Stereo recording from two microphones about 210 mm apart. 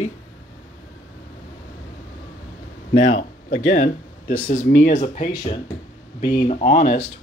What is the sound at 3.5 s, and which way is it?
Speech, 40° left (ahead or behind).